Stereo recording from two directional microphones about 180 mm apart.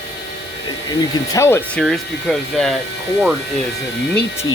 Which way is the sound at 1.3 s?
15° left (ahead or behind).